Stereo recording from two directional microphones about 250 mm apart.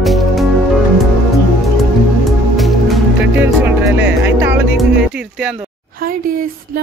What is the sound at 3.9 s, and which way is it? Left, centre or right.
Music, right.